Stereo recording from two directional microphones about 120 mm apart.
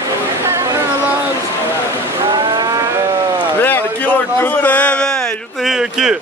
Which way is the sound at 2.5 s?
30° right (ahead or behind).